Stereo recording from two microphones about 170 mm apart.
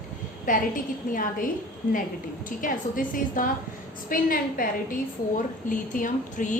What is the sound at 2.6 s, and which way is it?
A woman's voice, 55° left (ahead or behind).